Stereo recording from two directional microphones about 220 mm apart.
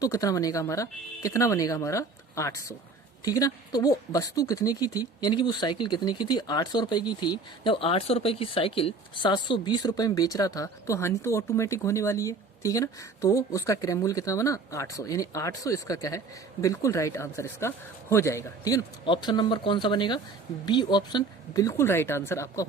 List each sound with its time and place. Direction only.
0.0 s speech: 15° left (ahead or behind)